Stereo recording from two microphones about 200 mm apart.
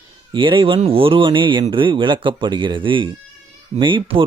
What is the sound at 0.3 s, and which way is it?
A man's voice, 25° right (ahead or behind).